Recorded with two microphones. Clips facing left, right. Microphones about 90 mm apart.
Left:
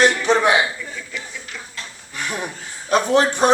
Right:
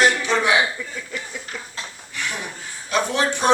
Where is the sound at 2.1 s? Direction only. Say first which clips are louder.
Left 3 dB; 40° left (ahead or behind).